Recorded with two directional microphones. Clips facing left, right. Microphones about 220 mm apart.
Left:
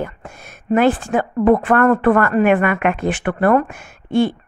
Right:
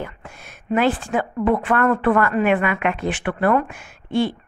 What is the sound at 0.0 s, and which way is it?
A woman's voice, 45° left (ahead or behind).